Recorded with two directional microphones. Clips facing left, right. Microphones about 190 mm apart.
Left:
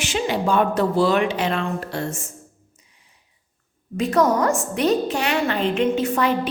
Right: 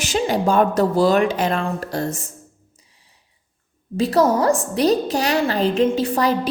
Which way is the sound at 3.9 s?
35° right (ahead or behind).